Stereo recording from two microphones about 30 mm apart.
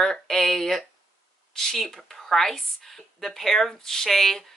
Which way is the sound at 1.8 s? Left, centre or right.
Centre.